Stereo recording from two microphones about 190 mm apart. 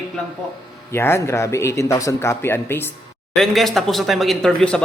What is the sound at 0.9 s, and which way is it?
Speech, 10° left (ahead or behind).